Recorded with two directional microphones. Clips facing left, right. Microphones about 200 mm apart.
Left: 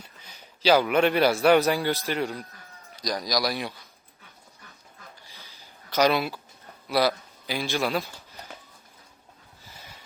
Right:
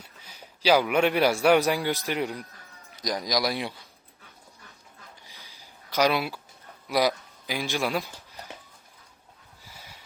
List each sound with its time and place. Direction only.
0.0 s a man's voice: 10° right (ahead or behind)
5.2 s a sound: 15° right (ahead or behind)
6.8 s a man's voice: 15° right (ahead or behind)